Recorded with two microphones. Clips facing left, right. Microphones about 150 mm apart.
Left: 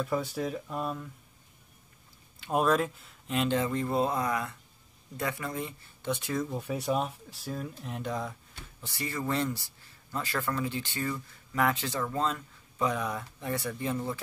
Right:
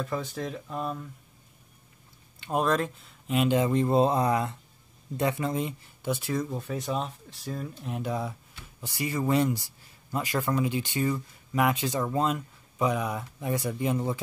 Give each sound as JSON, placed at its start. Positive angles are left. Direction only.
{"t": 0.0, "sound": "speech", "side_deg": 10}
{"t": 2.4, "sound": "speech", "side_deg": 5}
{"t": 6.0, "sound": "speech", "side_deg": -5}
{"t": 6.6, "sound": "speech", "side_deg": 10}